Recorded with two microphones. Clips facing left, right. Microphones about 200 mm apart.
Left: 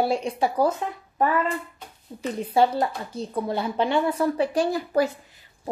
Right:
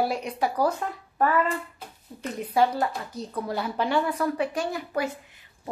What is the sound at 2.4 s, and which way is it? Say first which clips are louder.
Speech: left 2 dB; 30° left (ahead or behind).